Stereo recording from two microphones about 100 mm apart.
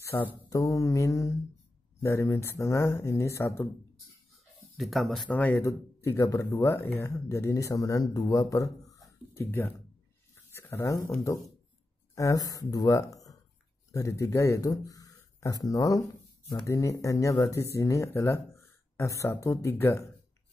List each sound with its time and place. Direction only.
0.0 s a sound: 25° left (ahead or behind)
0.5 s speech: 35° left (ahead or behind)
4.7 s speech: centre (ahead or behind)
5.3 s a man's voice: 15° left (ahead or behind)
5.6 s speech: 30° left (ahead or behind)